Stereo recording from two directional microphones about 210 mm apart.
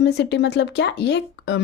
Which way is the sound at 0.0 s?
55° left (ahead or behind).